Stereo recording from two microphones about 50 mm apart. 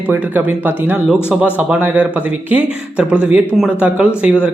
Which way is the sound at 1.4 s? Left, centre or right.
Right.